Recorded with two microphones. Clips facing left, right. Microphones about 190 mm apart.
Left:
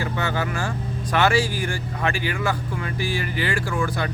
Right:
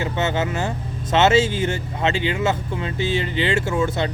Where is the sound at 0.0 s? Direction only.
20° right (ahead or behind).